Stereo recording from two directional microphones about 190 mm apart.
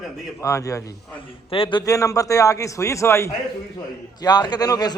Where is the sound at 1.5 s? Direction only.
25° left (ahead or behind).